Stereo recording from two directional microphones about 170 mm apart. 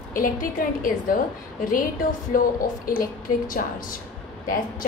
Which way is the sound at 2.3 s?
55° left (ahead or behind).